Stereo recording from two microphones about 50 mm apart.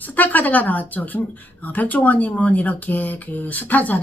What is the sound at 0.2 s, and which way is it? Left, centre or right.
Speech, left.